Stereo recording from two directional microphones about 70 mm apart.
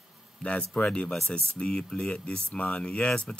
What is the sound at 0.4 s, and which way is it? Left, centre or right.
Speech, centre.